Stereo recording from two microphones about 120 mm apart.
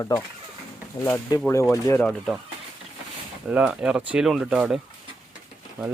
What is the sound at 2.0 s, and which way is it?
Speech, 10° left (ahead or behind).